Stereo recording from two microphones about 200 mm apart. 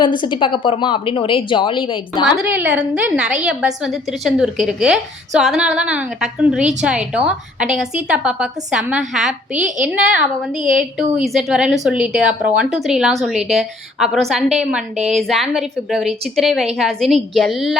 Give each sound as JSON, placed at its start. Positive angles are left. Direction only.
{"t": 0.0, "sound": "a woman's voice", "side_deg": 25}
{"t": 2.2, "sound": "a woman's voice", "side_deg": -10}